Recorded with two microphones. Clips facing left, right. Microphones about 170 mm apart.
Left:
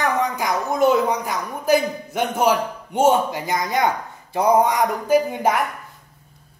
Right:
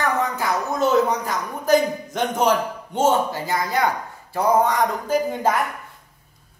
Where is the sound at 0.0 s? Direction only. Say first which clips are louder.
Left 1 dB; 15° left (ahead or behind).